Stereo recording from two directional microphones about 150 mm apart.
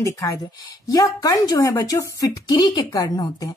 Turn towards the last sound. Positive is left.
turn(degrees=25)  # may be behind; listen again after turning